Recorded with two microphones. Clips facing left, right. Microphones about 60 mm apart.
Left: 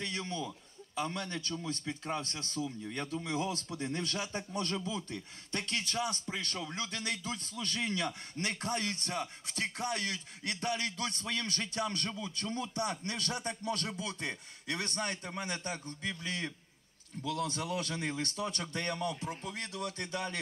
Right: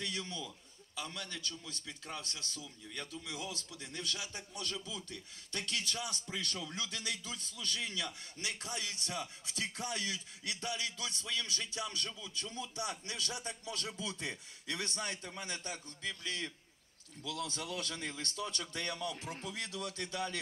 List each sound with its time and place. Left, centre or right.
0.0 s a man's voice: left
16.0 s a man's voice: left
17.6 s speech: centre
18.5 s a man's voice: left